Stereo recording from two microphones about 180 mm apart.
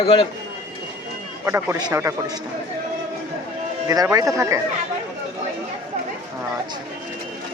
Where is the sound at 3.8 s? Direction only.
20° right (ahead or behind).